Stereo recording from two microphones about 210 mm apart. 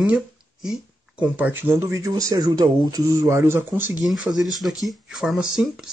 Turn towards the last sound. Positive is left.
turn(degrees=-5)  # may be behind; listen again after turning